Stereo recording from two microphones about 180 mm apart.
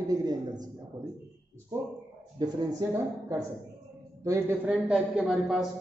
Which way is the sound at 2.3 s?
20° right (ahead or behind).